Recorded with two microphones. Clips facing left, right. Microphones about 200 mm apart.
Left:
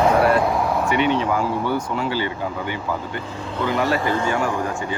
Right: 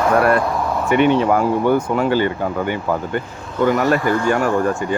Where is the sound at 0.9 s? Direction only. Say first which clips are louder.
Right 9 dB; 50° right (ahead or behind).